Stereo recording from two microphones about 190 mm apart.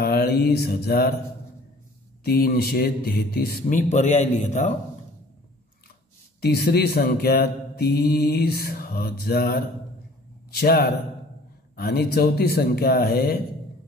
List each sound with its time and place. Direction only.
0.0 s mantra: 55° left (ahead or behind)
2.2 s a man's voice: 50° left (ahead or behind)
6.4 s a man's voice: 55° left (ahead or behind)